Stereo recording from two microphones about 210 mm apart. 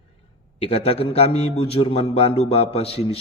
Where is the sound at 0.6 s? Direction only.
30° left (ahead or behind).